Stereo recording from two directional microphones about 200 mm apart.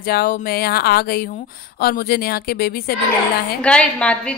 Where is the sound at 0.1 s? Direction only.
50° left (ahead or behind).